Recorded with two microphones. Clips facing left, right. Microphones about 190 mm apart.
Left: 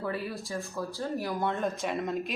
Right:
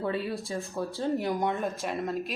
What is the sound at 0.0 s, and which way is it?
A woman's voice, 25° right (ahead or behind).